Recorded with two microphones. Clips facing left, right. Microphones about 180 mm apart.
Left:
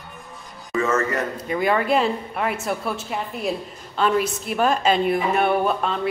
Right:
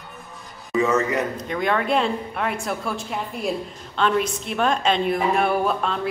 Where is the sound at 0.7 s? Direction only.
15° right (ahead or behind).